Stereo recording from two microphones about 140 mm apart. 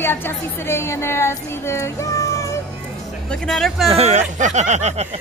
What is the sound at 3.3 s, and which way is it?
Speech, centre (ahead or behind).